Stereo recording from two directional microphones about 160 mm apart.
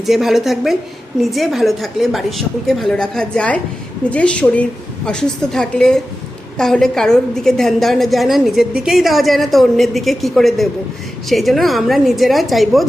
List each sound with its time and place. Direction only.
0.0 s a woman's voice: centre (ahead or behind)